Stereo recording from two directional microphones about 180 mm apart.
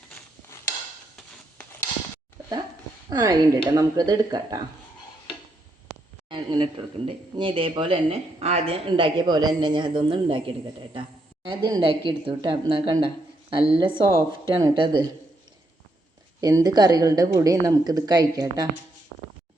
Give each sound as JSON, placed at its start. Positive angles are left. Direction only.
{"t": 3.1, "sound": "speech", "side_deg": -20}
{"t": 6.2, "sound": "speech", "side_deg": -25}
{"t": 16.4, "sound": "speech", "side_deg": -20}